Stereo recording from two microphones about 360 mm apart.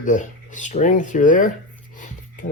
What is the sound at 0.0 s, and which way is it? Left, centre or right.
Speech, left.